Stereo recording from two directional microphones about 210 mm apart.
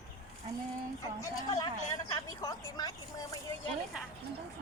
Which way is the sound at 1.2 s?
15° left (ahead or behind).